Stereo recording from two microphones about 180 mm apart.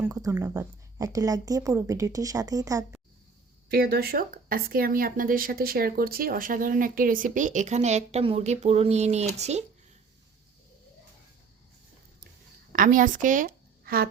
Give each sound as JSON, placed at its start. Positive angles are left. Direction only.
{"t": 0.0, "sound": "a woman's voice", "side_deg": -15}
{"t": 3.7, "sound": "speech", "side_deg": -55}
{"t": 12.7, "sound": "a woman's voice", "side_deg": -50}